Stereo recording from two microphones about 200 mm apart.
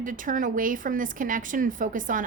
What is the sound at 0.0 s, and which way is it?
Speech, 40° right (ahead or behind).